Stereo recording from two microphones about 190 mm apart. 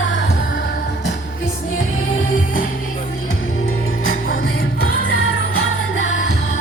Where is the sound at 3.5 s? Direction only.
90° left.